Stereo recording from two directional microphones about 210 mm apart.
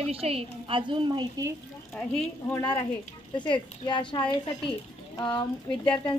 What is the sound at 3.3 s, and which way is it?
Speech, 20° left (ahead or behind).